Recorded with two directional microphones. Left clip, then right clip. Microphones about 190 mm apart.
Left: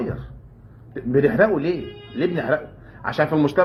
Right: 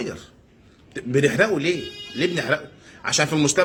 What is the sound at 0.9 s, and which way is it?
Speech, 25° right (ahead or behind).